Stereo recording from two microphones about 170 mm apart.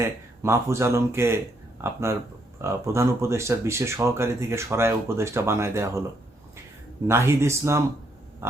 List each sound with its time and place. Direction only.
0.0 s speech: 15° right (ahead or behind)
7.1 s speech: 15° right (ahead or behind)